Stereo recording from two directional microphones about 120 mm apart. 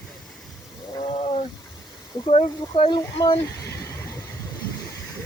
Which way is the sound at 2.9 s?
35° left (ahead or behind).